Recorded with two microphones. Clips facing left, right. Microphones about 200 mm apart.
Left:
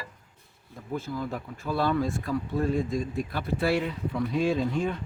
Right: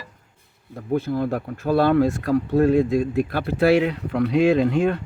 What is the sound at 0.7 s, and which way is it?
Speech, 60° right (ahead or behind).